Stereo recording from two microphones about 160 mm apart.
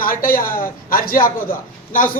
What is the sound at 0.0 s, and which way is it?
A man's voice, 65° left (ahead or behind).